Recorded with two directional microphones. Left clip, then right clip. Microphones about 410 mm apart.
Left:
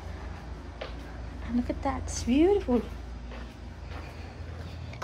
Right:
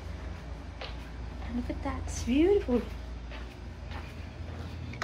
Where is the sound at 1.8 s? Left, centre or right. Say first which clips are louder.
Left 5 dB; centre.